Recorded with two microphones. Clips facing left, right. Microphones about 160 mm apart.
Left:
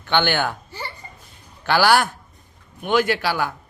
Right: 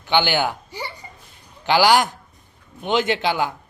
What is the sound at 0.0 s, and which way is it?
A man's voice, 15° right (ahead or behind).